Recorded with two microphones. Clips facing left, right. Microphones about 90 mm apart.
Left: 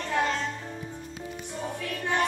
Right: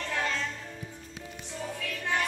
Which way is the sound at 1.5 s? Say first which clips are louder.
Left 2 dB; 20° left (ahead or behind).